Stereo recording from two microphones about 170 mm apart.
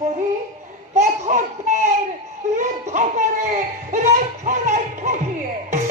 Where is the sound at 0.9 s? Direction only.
40° right (ahead or behind).